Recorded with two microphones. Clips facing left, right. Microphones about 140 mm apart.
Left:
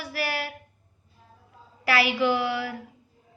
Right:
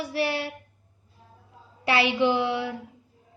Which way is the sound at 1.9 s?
25° right (ahead or behind).